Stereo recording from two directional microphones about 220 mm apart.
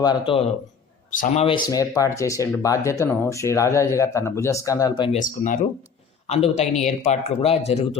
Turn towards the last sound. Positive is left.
turn(degrees=30)  # may be behind; listen again after turning